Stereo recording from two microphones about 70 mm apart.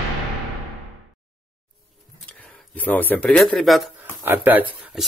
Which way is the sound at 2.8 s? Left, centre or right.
Left.